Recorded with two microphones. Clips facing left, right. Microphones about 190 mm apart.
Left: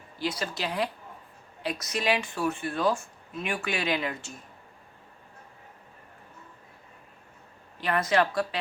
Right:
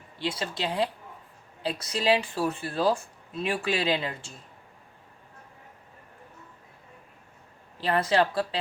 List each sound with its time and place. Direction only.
0.2 s speech: 25° right (ahead or behind)
7.8 s speech: 30° right (ahead or behind)